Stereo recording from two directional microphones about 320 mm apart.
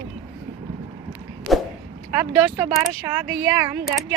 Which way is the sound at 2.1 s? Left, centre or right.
Centre.